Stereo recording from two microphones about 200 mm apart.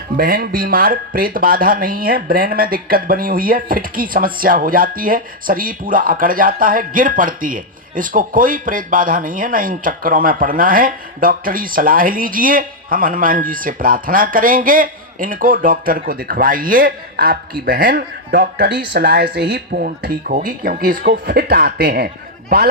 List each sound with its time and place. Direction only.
0.2 s speech: 45° right (ahead or behind)